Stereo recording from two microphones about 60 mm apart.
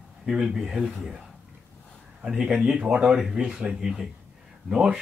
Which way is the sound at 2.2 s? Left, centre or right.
Centre.